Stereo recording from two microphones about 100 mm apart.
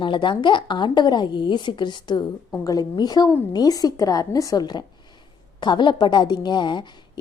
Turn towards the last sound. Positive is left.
turn(degrees=50)  # may be behind; listen again after turning